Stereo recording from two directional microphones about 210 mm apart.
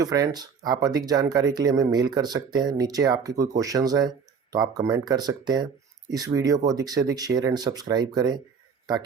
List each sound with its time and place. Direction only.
0.0 s speech: 15° right (ahead or behind)